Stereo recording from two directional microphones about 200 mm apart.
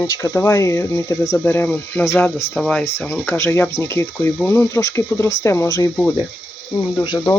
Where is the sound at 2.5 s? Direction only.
Centre (ahead or behind).